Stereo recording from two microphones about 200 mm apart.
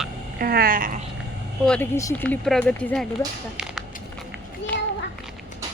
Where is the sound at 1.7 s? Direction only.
10° left (ahead or behind).